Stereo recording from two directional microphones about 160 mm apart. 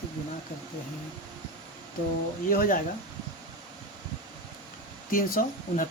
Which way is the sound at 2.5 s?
60° left (ahead or behind).